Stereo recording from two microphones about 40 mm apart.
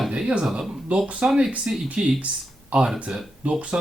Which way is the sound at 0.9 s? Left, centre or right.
Right.